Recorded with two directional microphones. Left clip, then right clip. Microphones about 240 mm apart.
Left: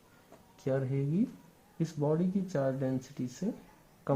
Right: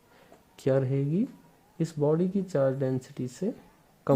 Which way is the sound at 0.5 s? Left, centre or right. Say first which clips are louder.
Right 7 dB; right.